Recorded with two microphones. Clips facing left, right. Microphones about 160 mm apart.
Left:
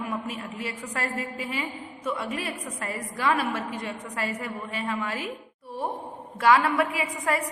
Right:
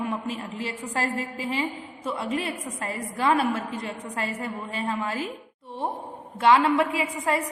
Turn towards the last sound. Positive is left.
turn(degrees=-25)  # may be behind; listen again after turning